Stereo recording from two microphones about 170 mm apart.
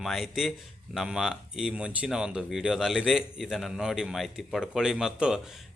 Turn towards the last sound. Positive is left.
turn(degrees=0)  # may be behind; listen again after turning